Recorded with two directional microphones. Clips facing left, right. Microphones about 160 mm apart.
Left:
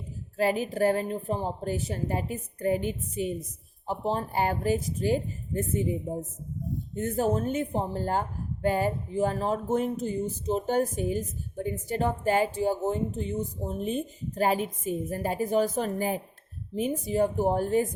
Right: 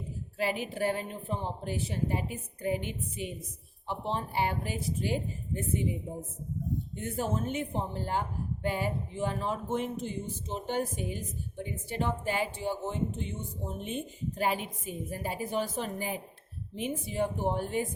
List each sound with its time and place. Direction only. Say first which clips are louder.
0.3 s speech: left 6 dB; 40° left (ahead or behind)